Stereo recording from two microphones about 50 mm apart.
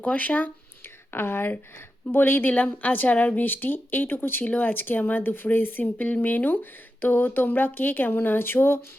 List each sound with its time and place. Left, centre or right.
0.0 s speech: left
1.1 s speech: left
2.5 s speech: left